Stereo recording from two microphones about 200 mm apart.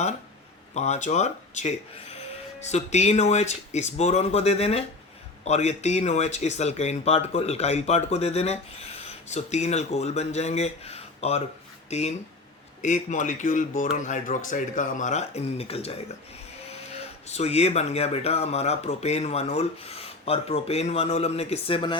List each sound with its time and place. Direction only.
0.7 s speech: 35° left (ahead or behind)